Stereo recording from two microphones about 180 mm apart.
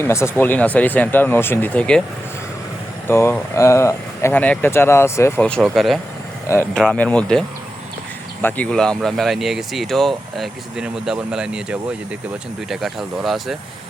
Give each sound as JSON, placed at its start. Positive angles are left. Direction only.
{"t": 0.0, "sound": "speech", "side_deg": 15}
{"t": 3.1, "sound": "speech", "side_deg": 15}